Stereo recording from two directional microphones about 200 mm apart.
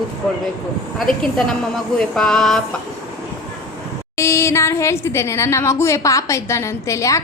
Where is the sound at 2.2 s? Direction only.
5° left (ahead or behind).